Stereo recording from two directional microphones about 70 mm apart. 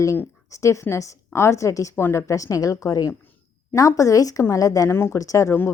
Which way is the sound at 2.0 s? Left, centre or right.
Left.